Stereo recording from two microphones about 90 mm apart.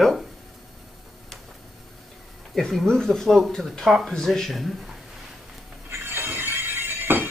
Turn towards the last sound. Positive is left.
turn(degrees=-20)  # may be behind; listen again after turning